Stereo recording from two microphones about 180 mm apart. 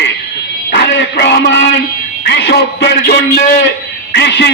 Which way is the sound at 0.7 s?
65° left (ahead or behind).